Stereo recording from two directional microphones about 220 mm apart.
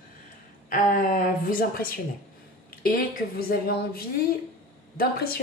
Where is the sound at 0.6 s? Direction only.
40° left (ahead or behind).